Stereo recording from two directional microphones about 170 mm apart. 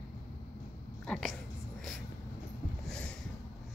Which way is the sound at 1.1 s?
Centre (ahead or behind).